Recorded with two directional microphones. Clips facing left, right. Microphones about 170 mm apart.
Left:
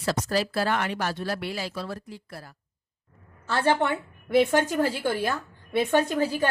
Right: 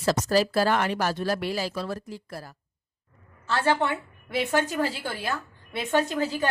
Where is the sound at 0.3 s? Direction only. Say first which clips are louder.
Right 4 dB; 40° right (ahead or behind).